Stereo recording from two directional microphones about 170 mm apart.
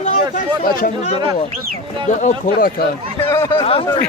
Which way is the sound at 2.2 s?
50° left (ahead or behind).